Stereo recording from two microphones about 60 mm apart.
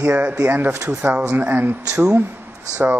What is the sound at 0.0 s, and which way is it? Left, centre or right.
Speech, right.